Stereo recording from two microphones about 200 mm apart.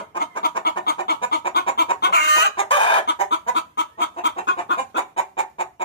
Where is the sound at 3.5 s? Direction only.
60° left (ahead or behind).